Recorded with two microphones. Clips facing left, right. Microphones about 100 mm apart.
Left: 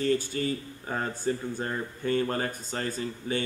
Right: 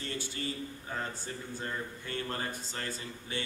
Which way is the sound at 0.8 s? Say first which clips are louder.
Left 11 dB; 50° left (ahead or behind).